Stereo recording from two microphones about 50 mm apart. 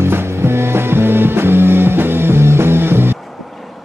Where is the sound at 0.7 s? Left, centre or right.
Right.